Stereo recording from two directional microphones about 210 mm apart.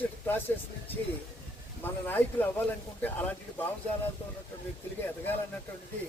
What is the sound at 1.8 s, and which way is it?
A man's voice, 10° left (ahead or behind).